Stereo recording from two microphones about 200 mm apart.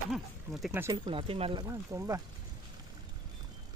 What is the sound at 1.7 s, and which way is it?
Speech, 15° right (ahead or behind).